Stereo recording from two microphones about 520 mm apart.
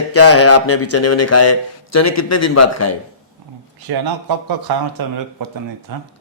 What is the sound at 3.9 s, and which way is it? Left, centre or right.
Speech, right.